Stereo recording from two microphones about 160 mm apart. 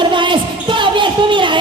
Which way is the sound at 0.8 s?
30° right (ahead or behind).